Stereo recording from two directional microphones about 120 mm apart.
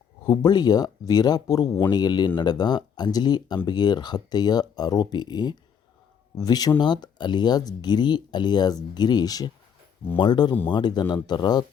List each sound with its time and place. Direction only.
0.3 s speech: 35° left (ahead or behind)